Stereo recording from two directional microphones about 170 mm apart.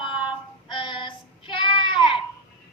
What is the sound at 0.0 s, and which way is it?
Child singing, 30° left (ahead or behind).